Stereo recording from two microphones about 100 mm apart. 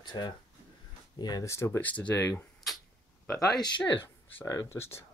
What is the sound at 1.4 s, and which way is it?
Speech, 30° left (ahead or behind).